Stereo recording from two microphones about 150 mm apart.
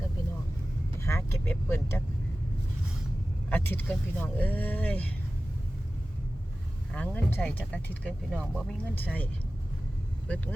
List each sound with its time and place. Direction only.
0.9 s speech: 20° left (ahead or behind)
3.5 s speech: 15° left (ahead or behind)
6.9 s speech: 10° left (ahead or behind)